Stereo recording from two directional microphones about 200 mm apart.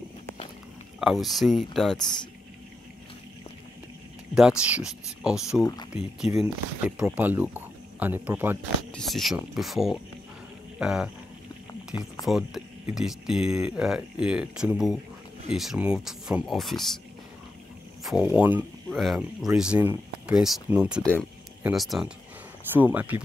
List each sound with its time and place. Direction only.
0.9 s speech: centre (ahead or behind)
4.4 s speech: 5° right (ahead or behind)
5.6 s speech: 20° left (ahead or behind)
6.2 s speech: 30° left (ahead or behind)
7.0 s speech: 10° right (ahead or behind)
8.9 s speech: centre (ahead or behind)
12.3 s speech: centre (ahead or behind)
18.0 s speech: 5° right (ahead or behind)
21.0 s speech: 5° left (ahead or behind)